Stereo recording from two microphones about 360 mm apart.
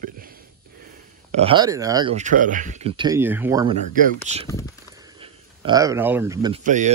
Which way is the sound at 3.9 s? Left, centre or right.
Right.